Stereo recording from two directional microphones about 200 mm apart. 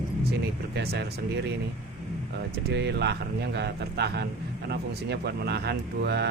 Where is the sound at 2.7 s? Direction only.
55° right (ahead or behind).